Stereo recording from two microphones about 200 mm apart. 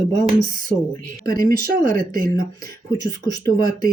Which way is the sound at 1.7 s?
45° right (ahead or behind).